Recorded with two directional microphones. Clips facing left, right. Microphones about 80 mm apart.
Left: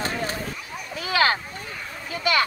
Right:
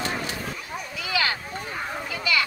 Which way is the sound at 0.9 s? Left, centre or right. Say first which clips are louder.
Left 6 dB; left.